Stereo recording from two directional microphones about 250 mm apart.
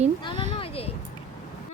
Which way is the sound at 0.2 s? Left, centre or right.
Centre.